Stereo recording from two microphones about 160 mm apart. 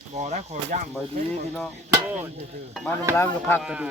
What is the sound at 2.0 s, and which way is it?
Speech, 10° right (ahead or behind).